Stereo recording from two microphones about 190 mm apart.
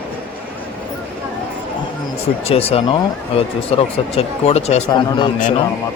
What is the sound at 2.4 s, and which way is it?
Speech, 30° left (ahead or behind).